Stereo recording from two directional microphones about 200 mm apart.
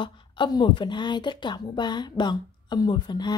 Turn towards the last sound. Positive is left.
turn(degrees=20)  # may be behind; listen again after turning